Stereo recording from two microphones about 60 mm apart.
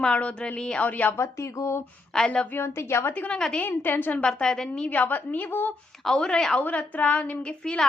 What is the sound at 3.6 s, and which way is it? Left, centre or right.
Speech, left.